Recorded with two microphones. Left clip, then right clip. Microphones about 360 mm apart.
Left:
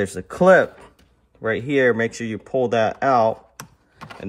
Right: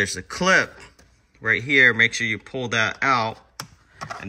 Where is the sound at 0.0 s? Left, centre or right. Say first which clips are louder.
Right 1 dB; left.